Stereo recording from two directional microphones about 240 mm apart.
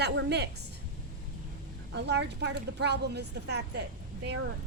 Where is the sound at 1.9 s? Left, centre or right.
Right.